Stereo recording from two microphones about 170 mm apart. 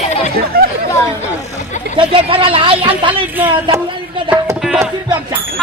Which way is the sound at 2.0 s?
30° right (ahead or behind).